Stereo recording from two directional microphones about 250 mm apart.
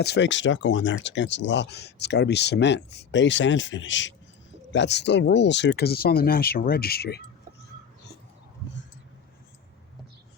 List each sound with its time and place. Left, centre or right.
0.0 s speech: left